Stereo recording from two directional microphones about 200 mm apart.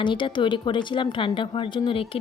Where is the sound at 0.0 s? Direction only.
25° left (ahead or behind).